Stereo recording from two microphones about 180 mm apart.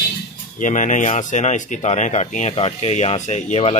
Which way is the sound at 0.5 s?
45° left (ahead or behind).